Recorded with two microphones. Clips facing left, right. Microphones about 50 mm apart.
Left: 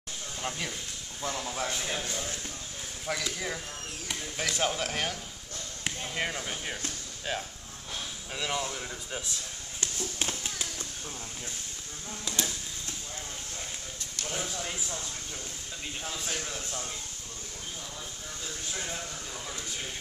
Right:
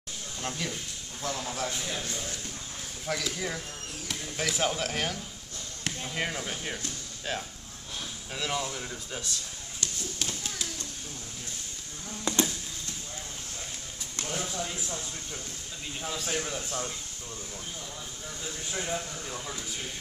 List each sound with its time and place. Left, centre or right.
0.4 s speech: centre
1.7 s a man's voice: left
2.0 s speech: centre
9.8 s a sound: left
12.3 s a sound: right
14.2 s a sound: centre
16.3 s speech: centre
18.4 s speech: centre
19.5 s speech: centre